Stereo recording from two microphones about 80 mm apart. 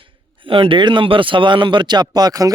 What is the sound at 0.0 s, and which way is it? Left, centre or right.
Speech, right.